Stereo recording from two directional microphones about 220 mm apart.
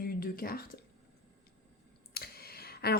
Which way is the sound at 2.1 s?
45° left (ahead or behind).